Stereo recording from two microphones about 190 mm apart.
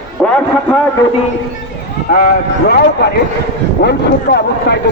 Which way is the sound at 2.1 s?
50° left (ahead or behind).